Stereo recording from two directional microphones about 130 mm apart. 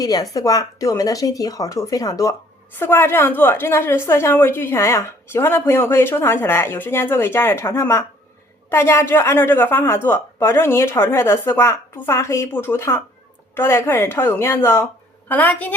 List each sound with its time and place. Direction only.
0.0 s a woman's voice: 30° left (ahead or behind); by 15.7 s 15° left (ahead or behind)